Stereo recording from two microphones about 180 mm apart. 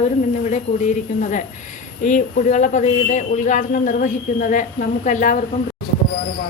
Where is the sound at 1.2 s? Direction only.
45° left (ahead or behind).